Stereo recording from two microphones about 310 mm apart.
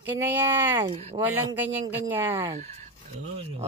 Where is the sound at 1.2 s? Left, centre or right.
Centre.